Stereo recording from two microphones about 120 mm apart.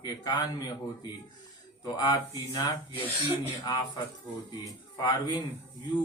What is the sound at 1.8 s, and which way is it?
Speech, 35° left (ahead or behind).